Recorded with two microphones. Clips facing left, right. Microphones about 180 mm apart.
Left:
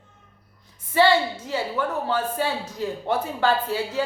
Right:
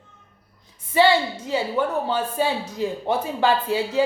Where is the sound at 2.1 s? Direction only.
15° right (ahead or behind).